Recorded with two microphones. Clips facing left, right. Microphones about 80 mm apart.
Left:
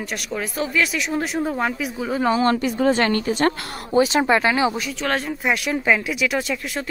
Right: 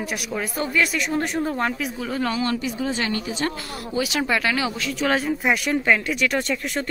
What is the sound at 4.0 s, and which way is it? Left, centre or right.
Speech, left.